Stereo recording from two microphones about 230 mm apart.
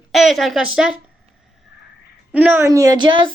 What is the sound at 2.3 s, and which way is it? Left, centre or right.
A woman's voice, centre.